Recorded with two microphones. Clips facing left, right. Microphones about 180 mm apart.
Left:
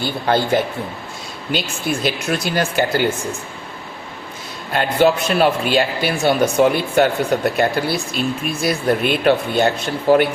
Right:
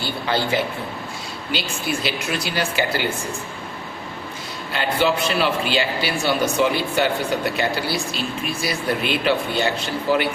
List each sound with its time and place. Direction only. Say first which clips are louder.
0.0 s speech: left 5 dB; 50° left (ahead or behind)
4.7 s speech: left 5 dB; 50° left (ahead or behind)